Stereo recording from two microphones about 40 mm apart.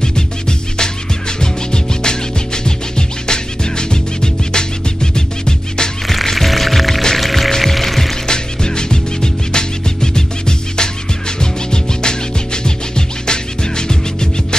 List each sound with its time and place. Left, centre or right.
0.0 s music: centre
6.3 s music: centre
8.3 s music: centre